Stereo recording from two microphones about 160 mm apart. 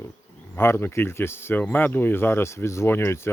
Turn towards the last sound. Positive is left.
turn(degrees=15)  # may be behind; listen again after turning